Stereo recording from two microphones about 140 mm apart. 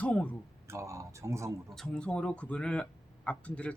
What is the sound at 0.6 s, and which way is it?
Speech, 20° right (ahead or behind).